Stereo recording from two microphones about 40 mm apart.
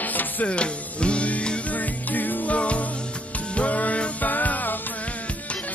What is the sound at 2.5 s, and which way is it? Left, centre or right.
Music, left.